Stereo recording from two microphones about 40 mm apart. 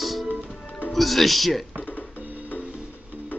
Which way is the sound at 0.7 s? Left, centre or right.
Left.